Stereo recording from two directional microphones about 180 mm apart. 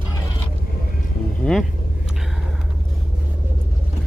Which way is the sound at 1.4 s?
10° left (ahead or behind).